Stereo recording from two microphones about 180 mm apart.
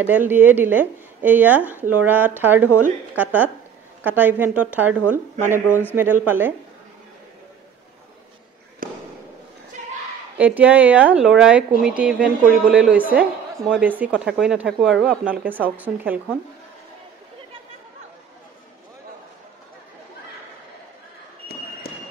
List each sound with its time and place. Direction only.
0.0 s a woman's voice: 10° right (ahead or behind)
5.7 s a man's voice: 10° left (ahead or behind)
6.2 s a woman's voice: 10° right (ahead or behind)
8.8 s fireworks: 50° right (ahead or behind)
10.3 s a woman's voice: 5° right (ahead or behind)